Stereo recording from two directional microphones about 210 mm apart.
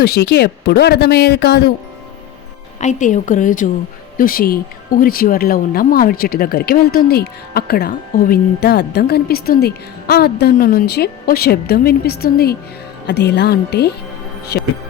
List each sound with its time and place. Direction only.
0.0 s speech: 50° left (ahead or behind)
2.8 s a woman's voice: 35° left (ahead or behind)